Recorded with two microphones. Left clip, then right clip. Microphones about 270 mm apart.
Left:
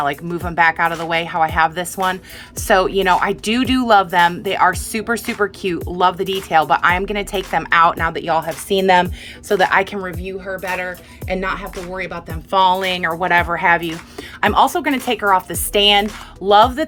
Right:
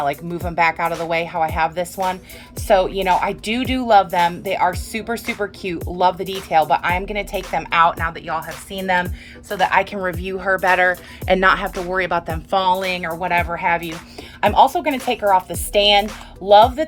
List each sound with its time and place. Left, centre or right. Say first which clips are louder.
0.0 s speech: left 1 dB; centre
10.0 s speech: right 3 dB; centre
10.4 s speech: right 9 dB; centre